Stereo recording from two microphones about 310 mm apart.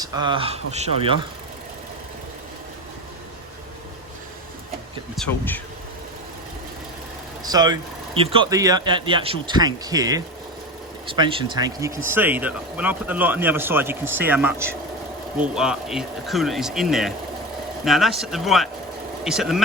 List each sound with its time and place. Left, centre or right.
0.0 s speech: centre
5.1 s speech: centre
7.4 s speech: centre